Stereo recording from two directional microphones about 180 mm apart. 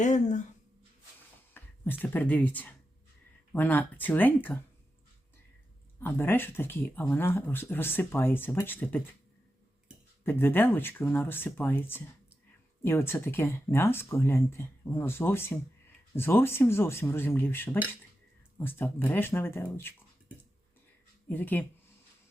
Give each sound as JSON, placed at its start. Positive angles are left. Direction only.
{"t": 0.0, "sound": "speech", "side_deg": 40}
{"t": 1.5, "sound": "speech", "side_deg": 10}
{"t": 6.0, "sound": "speech", "side_deg": 10}
{"t": 10.2, "sound": "speech", "side_deg": 10}
{"t": 21.2, "sound": "speech", "side_deg": 10}